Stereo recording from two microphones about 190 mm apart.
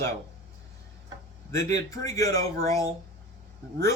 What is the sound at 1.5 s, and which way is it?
Speech, 15° left (ahead or behind).